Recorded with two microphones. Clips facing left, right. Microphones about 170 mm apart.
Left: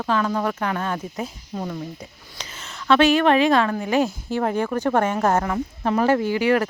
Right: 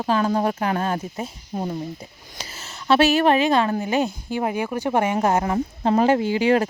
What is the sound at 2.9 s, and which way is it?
Speech, 5° right (ahead or behind).